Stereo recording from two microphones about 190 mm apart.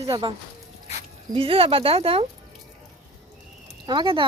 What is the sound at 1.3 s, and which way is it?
Speech, 30° right (ahead or behind).